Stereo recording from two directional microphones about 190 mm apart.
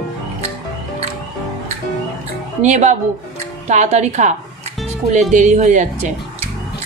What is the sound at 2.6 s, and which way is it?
A woman's voice, 40° right (ahead or behind).